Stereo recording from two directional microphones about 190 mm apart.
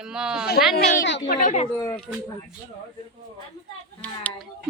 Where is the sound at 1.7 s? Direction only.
10° left (ahead or behind).